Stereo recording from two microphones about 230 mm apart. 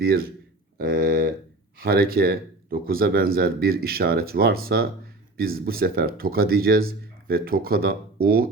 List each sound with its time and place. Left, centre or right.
0.0 s speech: right